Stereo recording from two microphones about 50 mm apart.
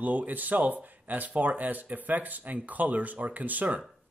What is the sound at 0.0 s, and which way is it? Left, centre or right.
Speech, right.